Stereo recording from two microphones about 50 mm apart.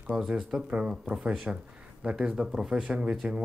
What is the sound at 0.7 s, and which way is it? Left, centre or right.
Speech, right.